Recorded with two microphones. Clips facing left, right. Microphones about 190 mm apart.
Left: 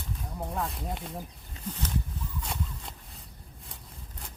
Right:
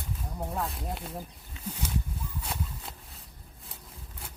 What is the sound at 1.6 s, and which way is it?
Wild animals, 40° left (ahead or behind).